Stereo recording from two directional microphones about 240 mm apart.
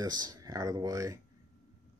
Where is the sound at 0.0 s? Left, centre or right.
Centre.